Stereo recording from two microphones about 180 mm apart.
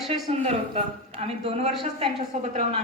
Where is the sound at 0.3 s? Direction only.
35° right (ahead or behind).